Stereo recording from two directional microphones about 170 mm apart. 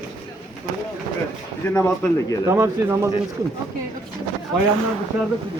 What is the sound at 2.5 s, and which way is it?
Speech, 15° right (ahead or behind).